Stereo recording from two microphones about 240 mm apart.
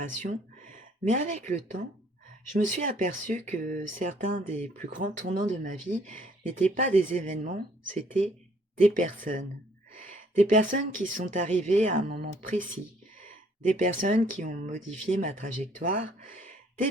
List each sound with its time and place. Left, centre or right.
0.0 s speech: right